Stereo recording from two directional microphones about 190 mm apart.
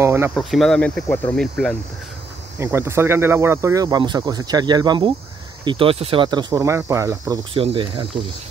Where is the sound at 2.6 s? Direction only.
15° right (ahead or behind).